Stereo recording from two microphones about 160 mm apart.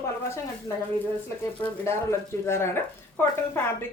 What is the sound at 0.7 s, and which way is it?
A woman's voice, 20° left (ahead or behind).